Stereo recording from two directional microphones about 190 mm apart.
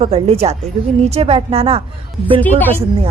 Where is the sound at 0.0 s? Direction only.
30° right (ahead or behind).